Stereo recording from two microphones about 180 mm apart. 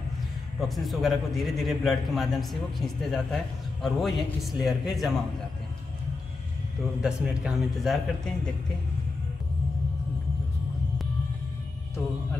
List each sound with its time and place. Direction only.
0.6 s a man's voice: centre (ahead or behind)
7.0 s a man's voice: 5° right (ahead or behind)